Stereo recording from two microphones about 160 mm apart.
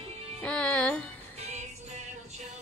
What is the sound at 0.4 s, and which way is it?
Music, 5° left (ahead or behind).